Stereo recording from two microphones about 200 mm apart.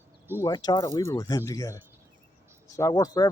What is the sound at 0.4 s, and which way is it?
Speech, 20° left (ahead or behind).